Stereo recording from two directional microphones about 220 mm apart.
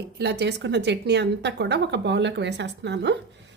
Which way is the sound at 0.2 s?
50° right (ahead or behind).